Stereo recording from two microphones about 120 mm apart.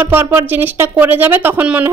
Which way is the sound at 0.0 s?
15° right (ahead or behind).